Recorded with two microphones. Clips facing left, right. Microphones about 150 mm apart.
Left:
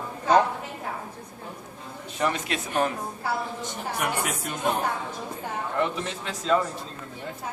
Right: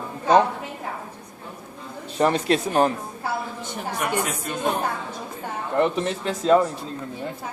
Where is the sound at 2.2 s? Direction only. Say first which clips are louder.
Right 7 dB; 35° right (ahead or behind).